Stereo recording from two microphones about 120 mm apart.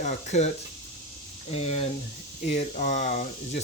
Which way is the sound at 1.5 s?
60° left (ahead or behind).